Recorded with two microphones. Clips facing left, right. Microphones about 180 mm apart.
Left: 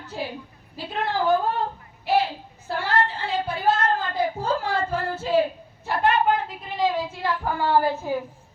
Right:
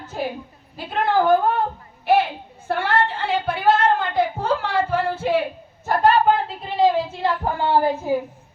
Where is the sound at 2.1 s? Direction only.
55° right (ahead or behind).